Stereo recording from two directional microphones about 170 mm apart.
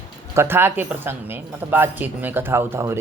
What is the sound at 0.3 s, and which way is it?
A woman's voice, 15° right (ahead or behind).